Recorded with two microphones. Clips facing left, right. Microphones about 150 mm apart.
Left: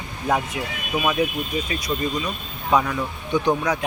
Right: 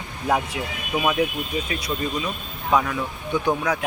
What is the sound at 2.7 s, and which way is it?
Speech, centre (ahead or behind).